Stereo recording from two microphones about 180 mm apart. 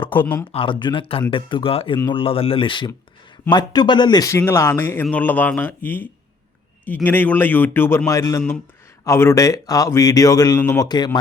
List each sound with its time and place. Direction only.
0.1 s a man's voice: 10° left (ahead or behind)
0.5 s a man's voice: 30° left (ahead or behind)